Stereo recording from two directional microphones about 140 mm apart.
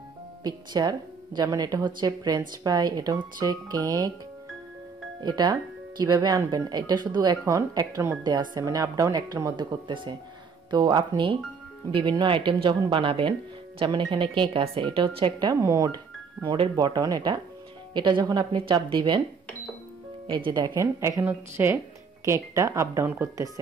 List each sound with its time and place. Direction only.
0.4 s speech: 30° right (ahead or behind)
5.2 s speech: 30° right (ahead or behind)
16.4 s speech: 35° right (ahead or behind)
20.2 s speech: 35° right (ahead or behind)
20.7 s speech: 20° right (ahead or behind)